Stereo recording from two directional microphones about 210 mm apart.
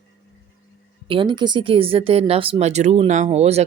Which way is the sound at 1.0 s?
25° right (ahead or behind).